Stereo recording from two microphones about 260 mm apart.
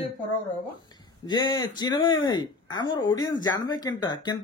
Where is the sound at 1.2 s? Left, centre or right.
Centre.